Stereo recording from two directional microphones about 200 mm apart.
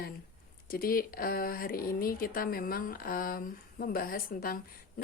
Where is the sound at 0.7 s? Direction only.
45° left (ahead or behind).